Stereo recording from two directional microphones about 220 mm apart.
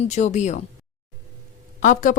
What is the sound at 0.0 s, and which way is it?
Speech, 30° left (ahead or behind).